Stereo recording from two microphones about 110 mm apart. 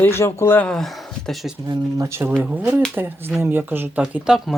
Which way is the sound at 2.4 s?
10° right (ahead or behind).